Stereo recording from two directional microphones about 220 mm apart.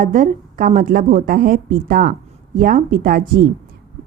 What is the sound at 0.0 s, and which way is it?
A woman's voice, 35° right (ahead or behind).